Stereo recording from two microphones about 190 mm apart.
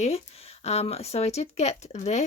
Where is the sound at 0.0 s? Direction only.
35° left (ahead or behind).